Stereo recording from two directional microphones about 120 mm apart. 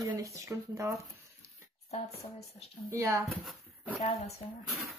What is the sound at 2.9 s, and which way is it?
Speech, 25° right (ahead or behind).